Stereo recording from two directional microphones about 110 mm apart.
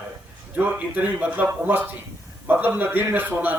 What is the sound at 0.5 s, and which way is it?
A man's voice, 15° right (ahead or behind).